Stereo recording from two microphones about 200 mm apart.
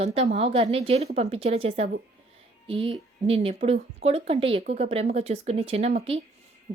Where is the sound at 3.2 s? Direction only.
30° right (ahead or behind).